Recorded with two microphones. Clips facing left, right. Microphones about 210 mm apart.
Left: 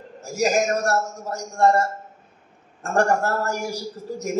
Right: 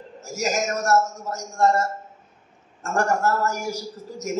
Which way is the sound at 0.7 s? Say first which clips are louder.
Right 1 dB; 30° left (ahead or behind).